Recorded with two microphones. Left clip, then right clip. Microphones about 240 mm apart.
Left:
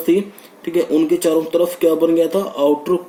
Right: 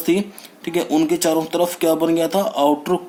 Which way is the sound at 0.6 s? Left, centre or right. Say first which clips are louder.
Left 2 dB; right.